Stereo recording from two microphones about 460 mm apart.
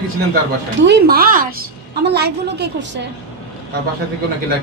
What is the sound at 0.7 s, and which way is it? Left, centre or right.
A woman's voice, right.